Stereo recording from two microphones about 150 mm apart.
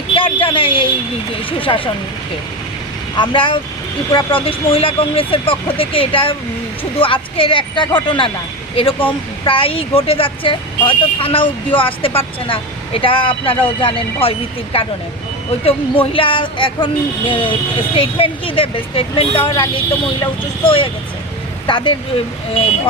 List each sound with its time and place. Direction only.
0.2 s a sound: 35° left (ahead or behind)
1.5 s speech: 35° left (ahead or behind)
3.2 s speech: 35° left (ahead or behind)